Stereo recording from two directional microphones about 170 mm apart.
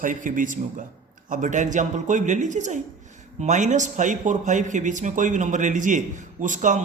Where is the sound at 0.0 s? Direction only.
50° right (ahead or behind).